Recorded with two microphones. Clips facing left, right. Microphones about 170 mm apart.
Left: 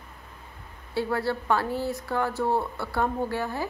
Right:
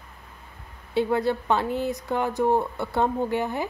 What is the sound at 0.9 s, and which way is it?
A woman's voice, 20° right (ahead or behind).